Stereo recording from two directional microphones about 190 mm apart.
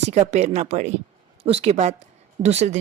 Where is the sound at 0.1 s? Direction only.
35° right (ahead or behind).